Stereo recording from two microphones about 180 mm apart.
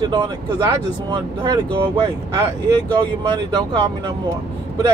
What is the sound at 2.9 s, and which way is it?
Speech, 25° right (ahead or behind).